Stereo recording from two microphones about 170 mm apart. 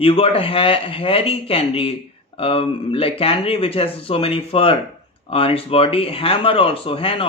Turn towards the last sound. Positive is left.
turn(degrees=35)  # may be behind; listen again after turning